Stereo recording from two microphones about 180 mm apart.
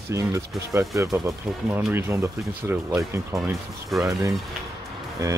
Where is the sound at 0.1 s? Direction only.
15° right (ahead or behind).